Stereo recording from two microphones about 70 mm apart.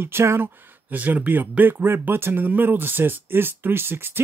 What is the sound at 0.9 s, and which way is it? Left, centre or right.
Speech, right.